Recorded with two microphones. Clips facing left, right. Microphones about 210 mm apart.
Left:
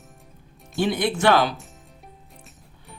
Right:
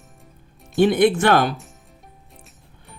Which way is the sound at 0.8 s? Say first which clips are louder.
Right 7 dB; 55° right (ahead or behind).